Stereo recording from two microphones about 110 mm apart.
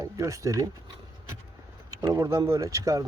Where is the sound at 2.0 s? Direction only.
30° right (ahead or behind).